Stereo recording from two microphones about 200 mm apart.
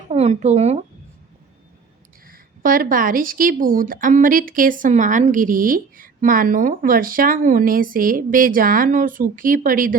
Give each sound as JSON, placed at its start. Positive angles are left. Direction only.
{"t": 0.1, "sound": "speech", "side_deg": -35}
{"t": 2.2, "sound": "a woman's voice", "side_deg": -45}